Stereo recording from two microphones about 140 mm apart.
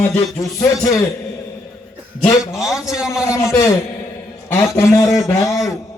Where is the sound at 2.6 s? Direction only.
5° right (ahead or behind).